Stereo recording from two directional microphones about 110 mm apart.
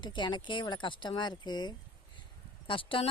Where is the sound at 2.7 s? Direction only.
50° left (ahead or behind).